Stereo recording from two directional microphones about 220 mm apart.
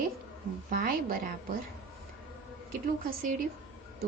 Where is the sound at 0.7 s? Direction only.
40° right (ahead or behind).